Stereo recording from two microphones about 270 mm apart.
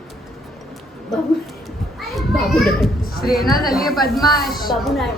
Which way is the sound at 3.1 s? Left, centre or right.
Left.